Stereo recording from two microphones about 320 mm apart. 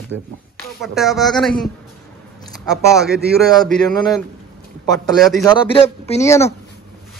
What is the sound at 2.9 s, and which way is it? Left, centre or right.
Speech, centre.